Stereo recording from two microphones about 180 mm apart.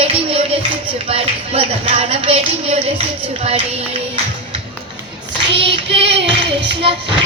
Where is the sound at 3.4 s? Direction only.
35° right (ahead or behind).